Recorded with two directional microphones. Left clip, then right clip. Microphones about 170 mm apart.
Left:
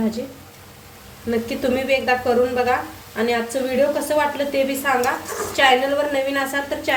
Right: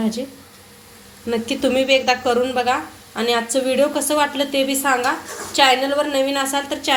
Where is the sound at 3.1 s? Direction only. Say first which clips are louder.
Right 2 dB; 40° right (ahead or behind).